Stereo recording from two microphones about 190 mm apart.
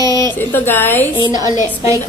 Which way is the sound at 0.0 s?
20° right (ahead or behind).